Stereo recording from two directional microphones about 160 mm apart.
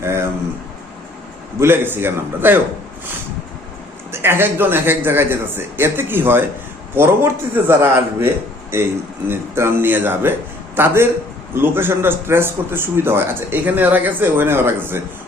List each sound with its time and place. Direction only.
0.0 s a sound: 15° right (ahead or behind)
1.5 s speech: 15° right (ahead or behind)
4.1 s speech: 15° right (ahead or behind)